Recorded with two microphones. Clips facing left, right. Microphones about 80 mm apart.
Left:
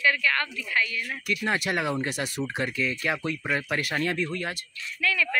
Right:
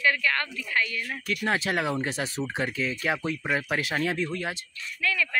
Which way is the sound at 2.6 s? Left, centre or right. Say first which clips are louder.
Even; right.